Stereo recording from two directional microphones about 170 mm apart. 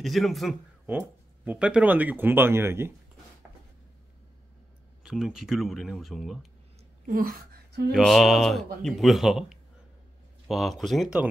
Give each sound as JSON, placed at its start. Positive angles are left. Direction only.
{"t": 0.0, "sound": "speech", "side_deg": 0}
{"t": 0.8, "sound": "speech", "side_deg": -10}
{"t": 5.0, "sound": "speech", "side_deg": -5}
{"t": 7.1, "sound": "speech", "side_deg": -55}
{"t": 7.9, "sound": "speech", "side_deg": 0}